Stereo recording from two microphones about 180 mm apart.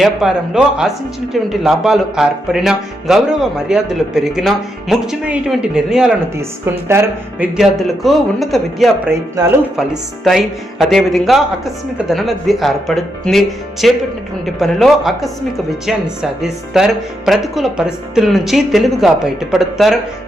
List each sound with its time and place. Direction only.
0.0 s speech: centre (ahead or behind)
6.3 s speech: 15° right (ahead or behind)
9.0 s speech: 20° right (ahead or behind)
9.7 s speech: centre (ahead or behind)